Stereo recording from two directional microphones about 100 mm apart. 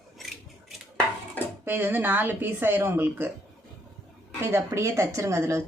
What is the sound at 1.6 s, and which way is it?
A woman's voice, 20° right (ahead or behind).